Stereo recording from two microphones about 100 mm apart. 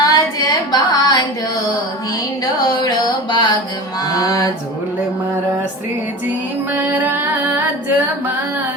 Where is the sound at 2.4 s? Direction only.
45° left (ahead or behind).